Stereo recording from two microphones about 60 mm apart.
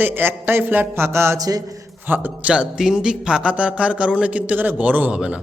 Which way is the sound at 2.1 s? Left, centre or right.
Right.